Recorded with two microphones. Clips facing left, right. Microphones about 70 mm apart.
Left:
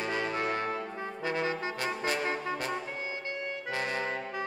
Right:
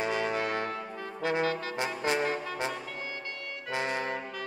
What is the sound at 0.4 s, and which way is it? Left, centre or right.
Music, left.